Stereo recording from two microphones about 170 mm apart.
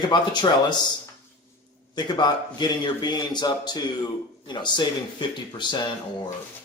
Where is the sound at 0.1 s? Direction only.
25° left (ahead or behind).